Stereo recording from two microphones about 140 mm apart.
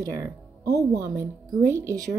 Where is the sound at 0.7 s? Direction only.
20° right (ahead or behind).